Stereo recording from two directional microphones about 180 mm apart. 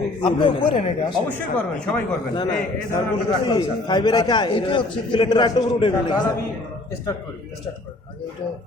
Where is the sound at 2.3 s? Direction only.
20° left (ahead or behind).